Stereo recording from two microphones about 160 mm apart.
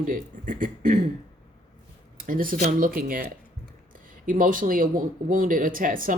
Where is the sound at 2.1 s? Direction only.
60° right (ahead or behind).